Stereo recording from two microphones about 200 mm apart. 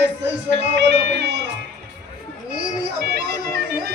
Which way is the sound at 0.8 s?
60° right (ahead or behind).